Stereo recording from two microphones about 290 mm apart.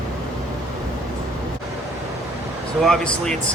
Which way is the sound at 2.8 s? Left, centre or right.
Centre.